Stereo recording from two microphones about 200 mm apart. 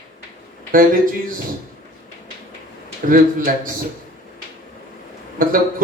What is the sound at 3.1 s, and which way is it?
Speech, 45° right (ahead or behind).